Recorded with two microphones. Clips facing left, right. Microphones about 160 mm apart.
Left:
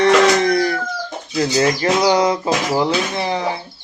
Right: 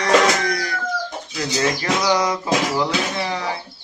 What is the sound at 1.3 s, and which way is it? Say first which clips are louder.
Speech: left 6 dB; 35° left (ahead or behind).